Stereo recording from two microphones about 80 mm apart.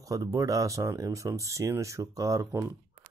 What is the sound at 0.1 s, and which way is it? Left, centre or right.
Speech, right.